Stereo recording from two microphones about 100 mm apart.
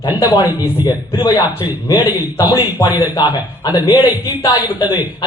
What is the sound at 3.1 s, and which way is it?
Speech, 40° left (ahead or behind).